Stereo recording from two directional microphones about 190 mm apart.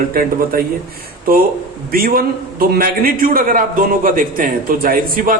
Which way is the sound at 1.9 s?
50° right (ahead or behind).